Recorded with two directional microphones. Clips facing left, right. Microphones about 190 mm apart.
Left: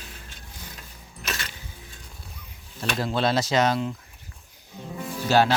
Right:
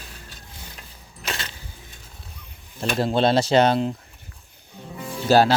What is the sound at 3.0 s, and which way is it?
Speech, 30° right (ahead or behind).